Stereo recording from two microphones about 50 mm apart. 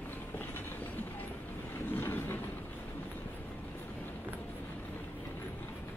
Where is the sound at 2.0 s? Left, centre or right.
Left.